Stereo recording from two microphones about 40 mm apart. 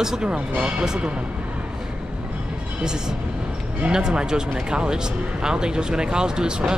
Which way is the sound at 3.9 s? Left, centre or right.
Centre.